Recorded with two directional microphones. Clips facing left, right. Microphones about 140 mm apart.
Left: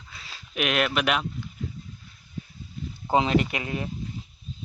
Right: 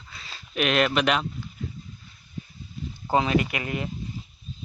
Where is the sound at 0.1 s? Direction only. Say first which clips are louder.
Right 2 dB; 10° left (ahead or behind).